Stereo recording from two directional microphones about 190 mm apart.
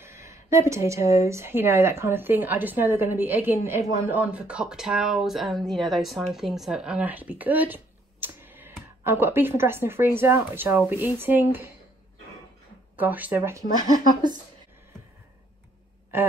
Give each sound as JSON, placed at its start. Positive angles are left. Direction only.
{"t": 0.0, "sound": "a woman's voice", "side_deg": -15}
{"t": 12.9, "sound": "a woman's voice", "side_deg": -10}